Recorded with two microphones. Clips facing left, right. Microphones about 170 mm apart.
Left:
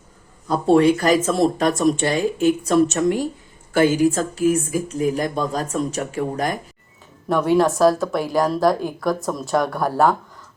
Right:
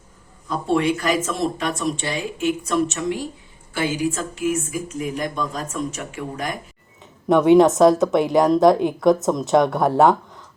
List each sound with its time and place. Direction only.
0.4 s speech: 40° left (ahead or behind)
7.3 s a woman's voice: 20° right (ahead or behind)